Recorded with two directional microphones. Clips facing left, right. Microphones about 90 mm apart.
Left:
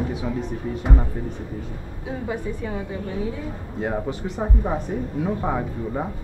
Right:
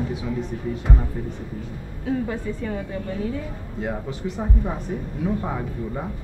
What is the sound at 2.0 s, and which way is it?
Speech, 15° left (ahead or behind).